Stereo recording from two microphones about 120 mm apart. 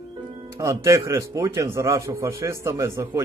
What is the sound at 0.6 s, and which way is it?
A man's voice, 25° right (ahead or behind).